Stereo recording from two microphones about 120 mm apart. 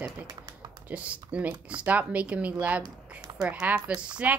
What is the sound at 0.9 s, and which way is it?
Speech, 10° right (ahead or behind).